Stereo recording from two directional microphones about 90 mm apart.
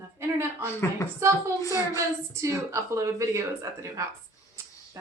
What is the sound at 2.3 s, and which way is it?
Speech, 35° right (ahead or behind).